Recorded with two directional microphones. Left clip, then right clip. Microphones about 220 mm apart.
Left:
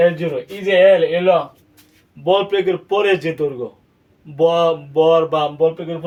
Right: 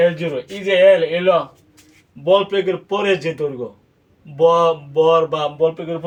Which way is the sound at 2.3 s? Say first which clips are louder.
Even; 20° left (ahead or behind).